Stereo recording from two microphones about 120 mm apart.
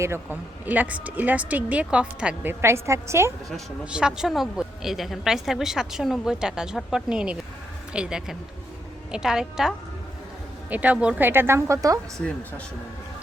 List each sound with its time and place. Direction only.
0.0 s speech: 20° right (ahead or behind)
3.8 s a woman's voice: 5° right (ahead or behind); by 12.2 s 25° right (ahead or behind)